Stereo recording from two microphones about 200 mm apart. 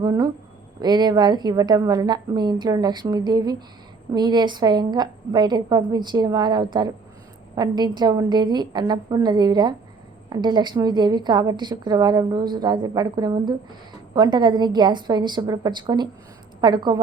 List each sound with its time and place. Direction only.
0.0 s a woman's voice: 20° right (ahead or behind)